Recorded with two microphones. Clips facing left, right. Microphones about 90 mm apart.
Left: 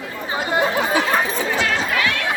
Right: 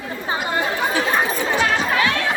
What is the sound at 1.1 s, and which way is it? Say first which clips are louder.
Chatter: even; 20° right (ahead or behind).